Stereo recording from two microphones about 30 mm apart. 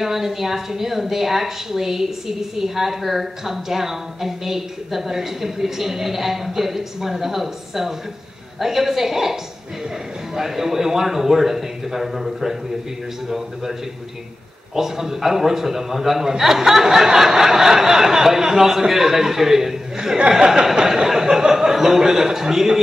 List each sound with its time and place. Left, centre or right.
0.0 s a woman's voice: centre
14.8 s a woman's voice: centre
20.2 s speech: right